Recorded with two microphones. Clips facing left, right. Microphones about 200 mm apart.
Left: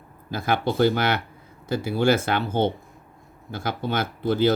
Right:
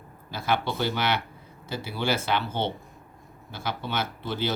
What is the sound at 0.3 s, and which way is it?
Speech, 50° left (ahead or behind).